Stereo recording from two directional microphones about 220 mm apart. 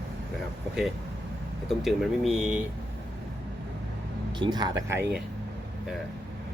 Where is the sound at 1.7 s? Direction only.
Centre (ahead or behind).